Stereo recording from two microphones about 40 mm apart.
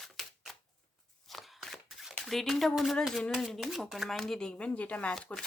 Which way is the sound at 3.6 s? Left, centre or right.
Centre.